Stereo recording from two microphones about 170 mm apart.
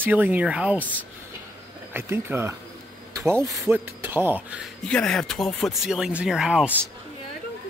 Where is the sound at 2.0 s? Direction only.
15° right (ahead or behind).